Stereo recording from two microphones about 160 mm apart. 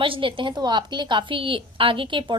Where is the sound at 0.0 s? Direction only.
30° right (ahead or behind).